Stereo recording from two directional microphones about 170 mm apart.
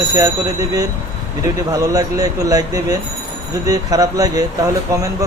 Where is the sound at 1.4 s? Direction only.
20° right (ahead or behind).